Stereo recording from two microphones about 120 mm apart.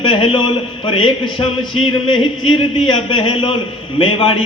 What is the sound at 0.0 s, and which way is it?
A man's voice, 50° left (ahead or behind).